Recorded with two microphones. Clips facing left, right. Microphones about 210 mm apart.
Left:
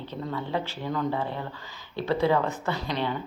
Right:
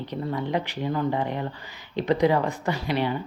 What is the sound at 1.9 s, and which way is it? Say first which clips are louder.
Speech: right 3 dB; 15° right (ahead or behind).